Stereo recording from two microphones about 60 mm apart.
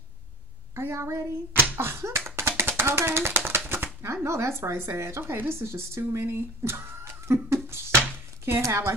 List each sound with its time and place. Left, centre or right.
0.7 s a woman's voice: right